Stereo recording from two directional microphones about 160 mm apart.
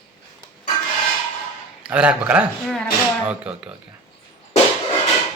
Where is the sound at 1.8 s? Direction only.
5° right (ahead or behind).